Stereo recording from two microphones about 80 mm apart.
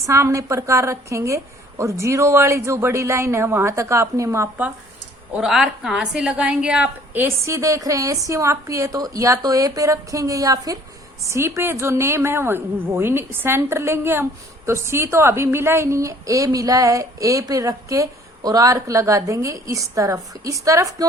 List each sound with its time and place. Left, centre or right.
0.0 s a woman's voice: right
5.4 s a woman's voice: centre; by 7.3 s right
7.4 s speech: right
11.2 s a woman's voice: right